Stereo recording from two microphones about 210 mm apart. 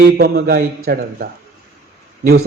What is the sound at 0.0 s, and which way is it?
A man's voice, 45° right (ahead or behind).